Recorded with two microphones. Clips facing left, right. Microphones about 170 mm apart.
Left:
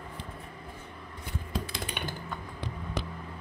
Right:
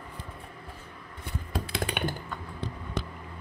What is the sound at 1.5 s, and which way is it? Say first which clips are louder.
Computer keyboard: right 4 dB; 60° right (ahead or behind).